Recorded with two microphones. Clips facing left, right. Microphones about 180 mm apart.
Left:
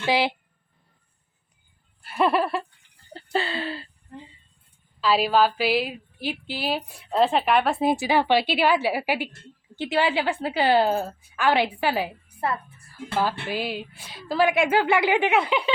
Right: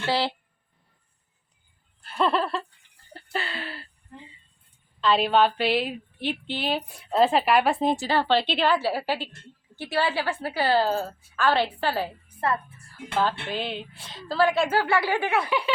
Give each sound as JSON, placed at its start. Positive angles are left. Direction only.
{"t": 0.0, "sound": "a woman's voice", "side_deg": 15}
{"t": 2.0, "sound": "a woman's voice", "side_deg": 10}
{"t": 3.1, "sound": "speech", "side_deg": 25}
{"t": 4.9, "sound": "a woman's voice", "side_deg": 5}